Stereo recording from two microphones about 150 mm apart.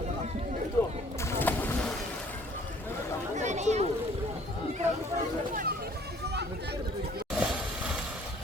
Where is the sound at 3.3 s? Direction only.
50° right (ahead or behind).